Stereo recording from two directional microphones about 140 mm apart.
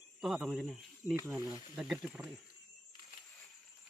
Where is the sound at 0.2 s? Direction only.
Centre (ahead or behind).